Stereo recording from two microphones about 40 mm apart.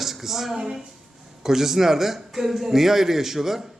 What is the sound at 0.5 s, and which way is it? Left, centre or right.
A man's voice, centre.